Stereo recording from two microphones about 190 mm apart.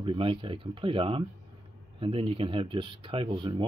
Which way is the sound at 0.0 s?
25° right (ahead or behind).